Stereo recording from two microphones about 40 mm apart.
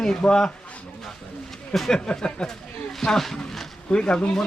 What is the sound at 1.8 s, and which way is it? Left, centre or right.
Speech, centre.